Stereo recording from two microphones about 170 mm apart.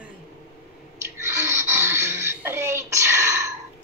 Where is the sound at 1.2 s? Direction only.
15° right (ahead or behind).